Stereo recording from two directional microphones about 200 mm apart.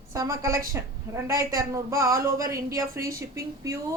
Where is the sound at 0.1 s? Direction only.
15° right (ahead or behind).